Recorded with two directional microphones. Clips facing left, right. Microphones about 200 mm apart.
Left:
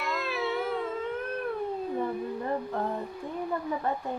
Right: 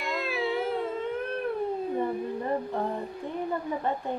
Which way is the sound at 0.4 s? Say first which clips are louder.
Right 2 dB; 30° right (ahead or behind).